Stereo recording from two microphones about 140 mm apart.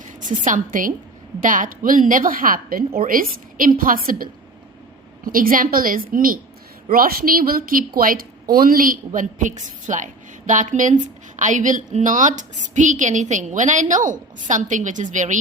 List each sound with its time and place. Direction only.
0.0 s a woman's voice: 65° right (ahead or behind)